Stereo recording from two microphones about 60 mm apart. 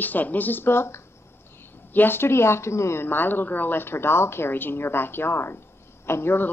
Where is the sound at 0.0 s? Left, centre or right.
Left.